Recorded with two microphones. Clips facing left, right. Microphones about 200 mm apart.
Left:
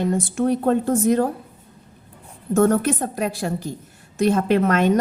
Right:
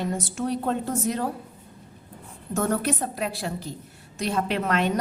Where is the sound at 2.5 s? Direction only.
50° left (ahead or behind).